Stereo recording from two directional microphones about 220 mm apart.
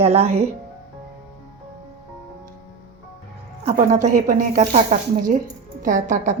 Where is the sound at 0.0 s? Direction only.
30° right (ahead or behind).